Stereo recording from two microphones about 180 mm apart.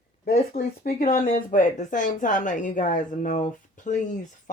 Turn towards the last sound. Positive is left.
turn(degrees=45)  # may be behind; listen again after turning